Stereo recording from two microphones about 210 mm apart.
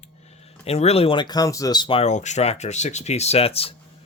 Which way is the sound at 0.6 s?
30° left (ahead or behind).